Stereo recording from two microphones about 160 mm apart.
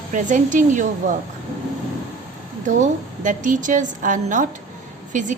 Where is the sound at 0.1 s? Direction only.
50° right (ahead or behind).